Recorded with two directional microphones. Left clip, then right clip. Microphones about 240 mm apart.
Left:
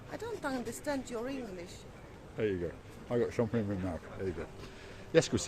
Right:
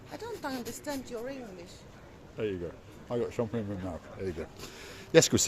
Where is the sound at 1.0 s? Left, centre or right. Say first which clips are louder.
Even; left.